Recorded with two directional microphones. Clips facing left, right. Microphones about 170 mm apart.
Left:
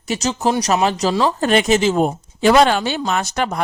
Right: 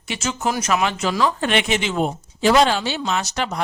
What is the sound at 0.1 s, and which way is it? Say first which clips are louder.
Speech: left 5 dB; 35° left (ahead or behind).